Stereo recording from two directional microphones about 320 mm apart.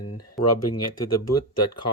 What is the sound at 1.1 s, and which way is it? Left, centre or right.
Speech, left.